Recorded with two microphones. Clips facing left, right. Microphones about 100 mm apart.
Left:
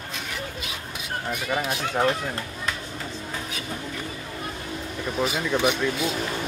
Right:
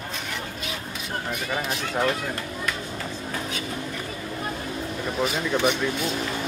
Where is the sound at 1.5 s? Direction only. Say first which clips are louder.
Left 2 dB; 10° left (ahead or behind).